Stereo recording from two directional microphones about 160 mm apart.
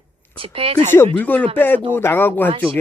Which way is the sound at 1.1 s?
10° left (ahead or behind).